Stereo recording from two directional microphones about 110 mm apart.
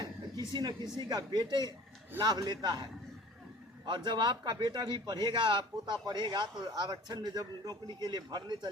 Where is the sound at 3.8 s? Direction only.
45° right (ahead or behind).